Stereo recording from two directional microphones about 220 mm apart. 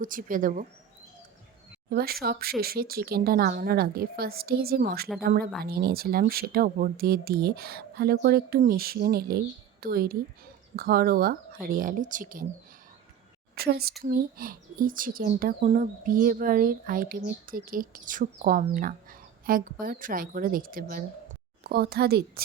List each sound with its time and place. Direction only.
0.0 s speech: 40° right (ahead or behind)
1.9 s speech: 45° right (ahead or behind)
13.6 s speech: 45° right (ahead or behind)